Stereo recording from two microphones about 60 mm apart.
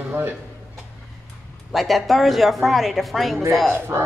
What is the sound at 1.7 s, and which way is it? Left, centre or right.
Speech, centre.